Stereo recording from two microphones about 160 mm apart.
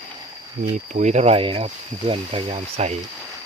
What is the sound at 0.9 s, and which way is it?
Speech, 45° right (ahead or behind).